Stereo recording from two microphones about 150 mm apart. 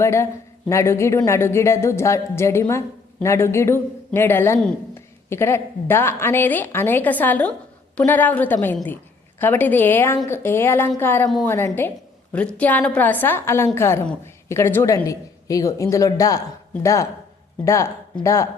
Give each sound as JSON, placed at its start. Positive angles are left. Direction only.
{"t": 0.0, "sound": "a woman's voice", "side_deg": 20}